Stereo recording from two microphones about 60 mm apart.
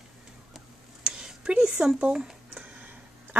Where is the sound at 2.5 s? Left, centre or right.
Right.